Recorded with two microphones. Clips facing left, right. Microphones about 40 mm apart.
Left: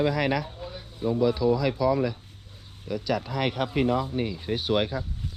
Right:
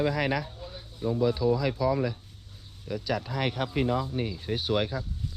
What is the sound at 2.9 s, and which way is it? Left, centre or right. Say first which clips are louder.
Speech: left 3 dB; left.